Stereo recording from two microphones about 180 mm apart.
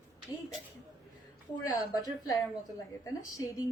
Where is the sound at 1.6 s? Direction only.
20° left (ahead or behind).